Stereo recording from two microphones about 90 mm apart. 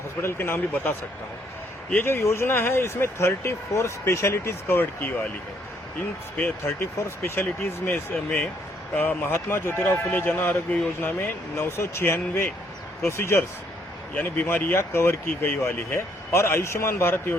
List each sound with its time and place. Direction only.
0.2 s speech: 30° left (ahead or behind)
6.7 s speech: 30° left (ahead or behind)
7.9 s speech: 15° left (ahead or behind)
14.1 s speech: 15° left (ahead or behind)
14.4 s speech: 25° left (ahead or behind)